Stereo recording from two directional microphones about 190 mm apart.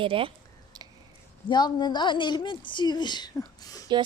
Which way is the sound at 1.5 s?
25° left (ahead or behind).